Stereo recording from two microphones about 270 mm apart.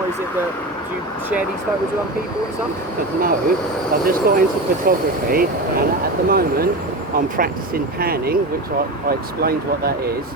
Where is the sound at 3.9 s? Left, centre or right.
Right.